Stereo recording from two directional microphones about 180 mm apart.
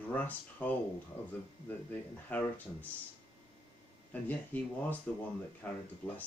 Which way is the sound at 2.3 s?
10° left (ahead or behind).